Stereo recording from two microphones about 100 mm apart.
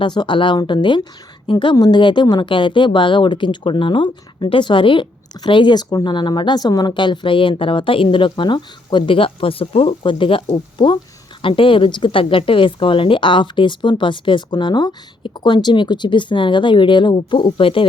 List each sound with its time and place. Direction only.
0.0 s a woman's voice: 50° left (ahead or behind)
1.7 s a woman's voice: 45° left (ahead or behind); by 10.4 s 60° left (ahead or behind)
10.5 s a woman's voice: 50° left (ahead or behind)
11.4 s a woman's voice: 60° left (ahead or behind)